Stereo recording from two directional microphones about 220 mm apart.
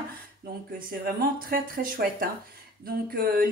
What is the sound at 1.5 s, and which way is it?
Speech, 40° right (ahead or behind).